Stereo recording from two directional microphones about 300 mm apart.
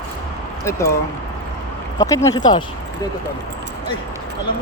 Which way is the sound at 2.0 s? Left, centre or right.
Centre.